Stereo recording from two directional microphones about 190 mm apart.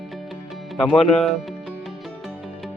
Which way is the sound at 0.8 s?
Centre (ahead or behind).